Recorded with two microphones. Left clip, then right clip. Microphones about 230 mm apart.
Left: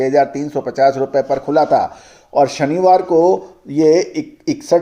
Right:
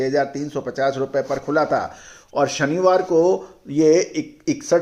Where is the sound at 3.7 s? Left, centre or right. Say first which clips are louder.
Left 3 dB; centre.